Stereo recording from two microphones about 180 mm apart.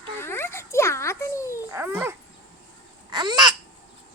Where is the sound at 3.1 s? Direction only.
25° right (ahead or behind).